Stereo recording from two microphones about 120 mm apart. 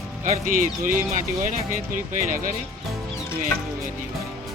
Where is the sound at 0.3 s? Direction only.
90° right.